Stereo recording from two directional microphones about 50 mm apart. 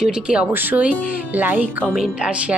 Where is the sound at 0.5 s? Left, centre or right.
Right.